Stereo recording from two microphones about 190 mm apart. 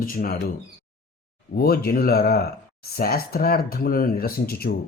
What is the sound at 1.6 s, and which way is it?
Speech, 55° left (ahead or behind).